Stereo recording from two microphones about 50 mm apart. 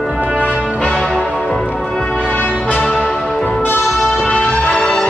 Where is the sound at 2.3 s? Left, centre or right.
Left.